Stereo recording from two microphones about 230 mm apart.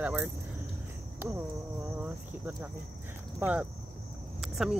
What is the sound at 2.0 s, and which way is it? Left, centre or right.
Speech, centre.